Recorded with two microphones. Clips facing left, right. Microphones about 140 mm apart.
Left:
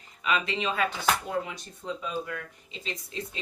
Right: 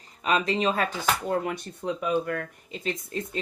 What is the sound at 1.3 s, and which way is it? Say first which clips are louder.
Speech: right 5 dB; 55° right (ahead or behind).